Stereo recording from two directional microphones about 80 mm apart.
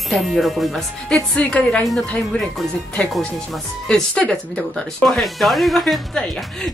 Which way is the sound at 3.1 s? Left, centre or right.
Centre.